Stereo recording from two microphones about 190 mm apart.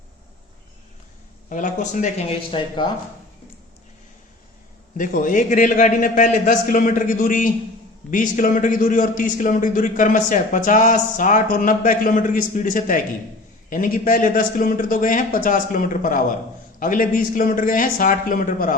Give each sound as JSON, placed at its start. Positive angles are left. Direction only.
{"t": 1.5, "sound": "speech", "side_deg": 40}
{"t": 4.9, "sound": "a man's voice", "side_deg": 45}